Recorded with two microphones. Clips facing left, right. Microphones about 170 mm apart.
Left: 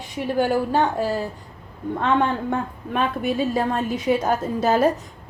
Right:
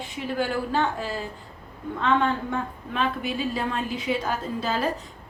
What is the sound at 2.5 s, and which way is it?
A woman's voice, 50° left (ahead or behind).